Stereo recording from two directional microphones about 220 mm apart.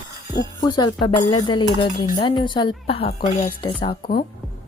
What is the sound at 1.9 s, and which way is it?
Speech, 40° left (ahead or behind).